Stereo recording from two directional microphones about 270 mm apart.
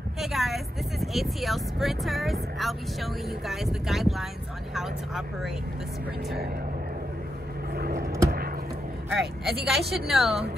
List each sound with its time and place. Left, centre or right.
0.2 s speech: centre
7.7 s vehicle: right
8.3 s a sound: right
9.1 s speech: centre